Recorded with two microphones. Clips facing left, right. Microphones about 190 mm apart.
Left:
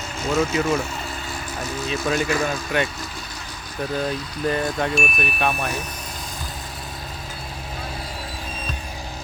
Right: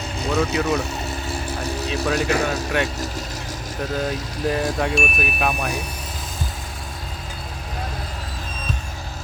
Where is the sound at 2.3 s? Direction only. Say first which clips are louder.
Right 2 dB; 75° right (ahead or behind).